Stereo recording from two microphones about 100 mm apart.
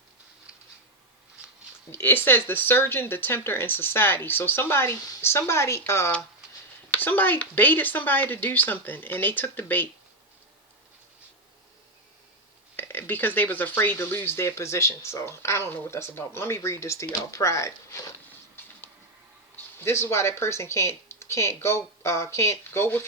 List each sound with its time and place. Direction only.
1.9 s speech: 20° left (ahead or behind)
12.7 s speech: 20° left (ahead or behind)
18.6 s a sound: 20° left (ahead or behind)
19.5 s speech: 25° left (ahead or behind)